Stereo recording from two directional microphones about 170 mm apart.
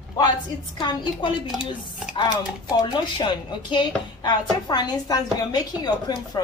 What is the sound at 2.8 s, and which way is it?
Speech, 30° left (ahead or behind).